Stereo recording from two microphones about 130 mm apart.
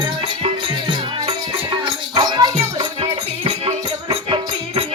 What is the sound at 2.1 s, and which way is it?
Music, 30° right (ahead or behind).